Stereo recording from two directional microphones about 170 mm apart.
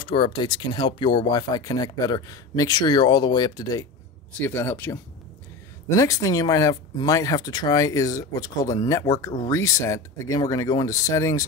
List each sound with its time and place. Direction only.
0.0 s speech: 30° left (ahead or behind)
4.4 s speech: 10° left (ahead or behind)